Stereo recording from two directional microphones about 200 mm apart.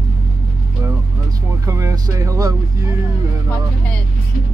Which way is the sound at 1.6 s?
15° right (ahead or behind).